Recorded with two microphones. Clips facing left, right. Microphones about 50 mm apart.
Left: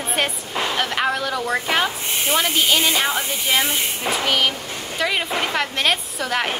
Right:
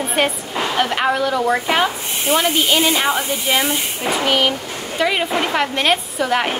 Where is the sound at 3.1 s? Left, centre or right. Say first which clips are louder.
Right 4 dB; right.